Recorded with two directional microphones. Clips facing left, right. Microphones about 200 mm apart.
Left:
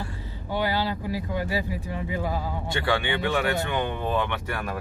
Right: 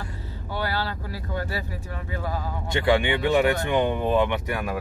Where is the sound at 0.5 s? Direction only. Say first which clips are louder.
Left 3 dB; 15° left (ahead or behind).